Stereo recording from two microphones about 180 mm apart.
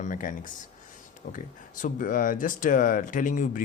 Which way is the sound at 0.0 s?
45° left (ahead or behind).